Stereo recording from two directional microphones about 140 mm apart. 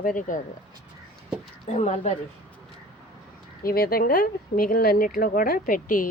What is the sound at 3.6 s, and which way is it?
A woman's voice, 90° left.